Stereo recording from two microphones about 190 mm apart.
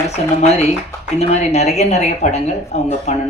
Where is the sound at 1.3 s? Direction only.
35° left (ahead or behind).